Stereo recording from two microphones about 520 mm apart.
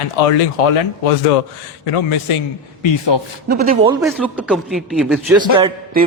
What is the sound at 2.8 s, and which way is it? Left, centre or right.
Speech, left.